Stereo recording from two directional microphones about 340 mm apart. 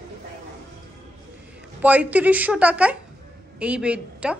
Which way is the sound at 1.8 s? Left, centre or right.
Centre.